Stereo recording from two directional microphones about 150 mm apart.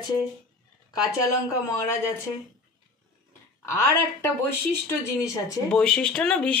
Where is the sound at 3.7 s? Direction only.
15° left (ahead or behind).